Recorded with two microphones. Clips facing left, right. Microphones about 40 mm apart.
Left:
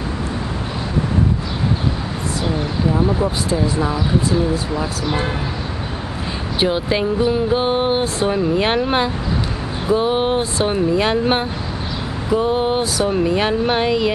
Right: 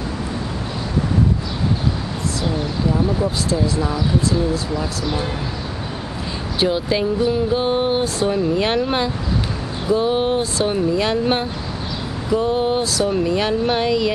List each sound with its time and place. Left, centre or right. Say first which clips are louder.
2.4 s vehicle: left 2 dB; centre
3.4 s speech: left 1 dB; left
6.6 s speech: left 1 dB; centre